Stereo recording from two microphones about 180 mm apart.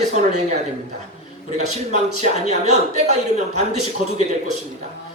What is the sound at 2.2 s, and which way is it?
A man's voice, 40° right (ahead or behind).